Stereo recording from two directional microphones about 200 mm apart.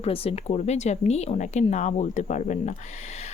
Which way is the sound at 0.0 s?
30° left (ahead or behind).